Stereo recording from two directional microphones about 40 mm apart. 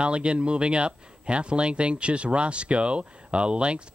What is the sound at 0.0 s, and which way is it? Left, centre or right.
Speech, right.